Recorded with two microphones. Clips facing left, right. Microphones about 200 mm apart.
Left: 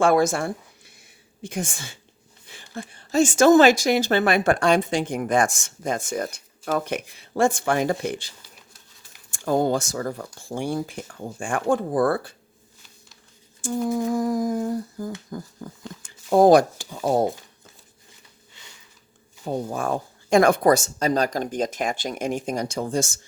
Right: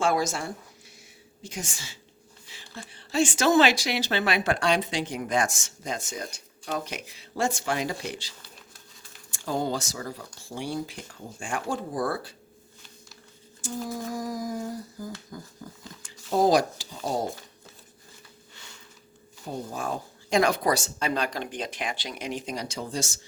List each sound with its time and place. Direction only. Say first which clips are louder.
0.0 s a woman's voice: left 7 dB; 55° left (ahead or behind)
9.3 s a woman's voice: left 7 dB; 50° left (ahead or behind)
13.6 s a woman's voice: left 9 dB; 55° left (ahead or behind)
19.5 s a woman's voice: left 6 dB; 50° left (ahead or behind)